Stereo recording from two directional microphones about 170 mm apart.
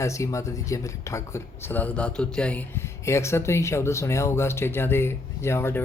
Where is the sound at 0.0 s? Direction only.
15° left (ahead or behind).